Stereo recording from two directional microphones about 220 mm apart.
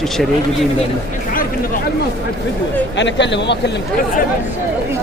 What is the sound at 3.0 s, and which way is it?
Speech, 55° left (ahead or behind).